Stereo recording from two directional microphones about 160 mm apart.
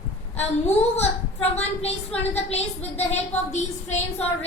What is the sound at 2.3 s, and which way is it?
A woman's voice, 40° left (ahead or behind).